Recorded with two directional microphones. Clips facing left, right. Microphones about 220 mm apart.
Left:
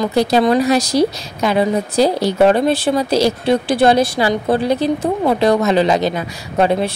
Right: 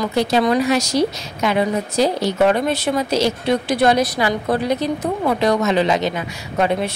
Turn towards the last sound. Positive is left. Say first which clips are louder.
# left 4 dB
turn(degrees=35)  # may be behind; listen again after turning